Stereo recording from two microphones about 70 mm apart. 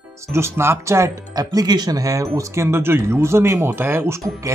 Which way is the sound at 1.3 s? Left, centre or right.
Right.